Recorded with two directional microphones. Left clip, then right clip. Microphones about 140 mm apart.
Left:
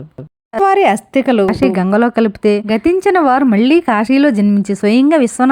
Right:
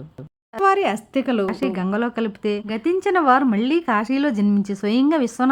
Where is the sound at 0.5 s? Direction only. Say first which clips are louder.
Left 7 dB; 45° left (ahead or behind).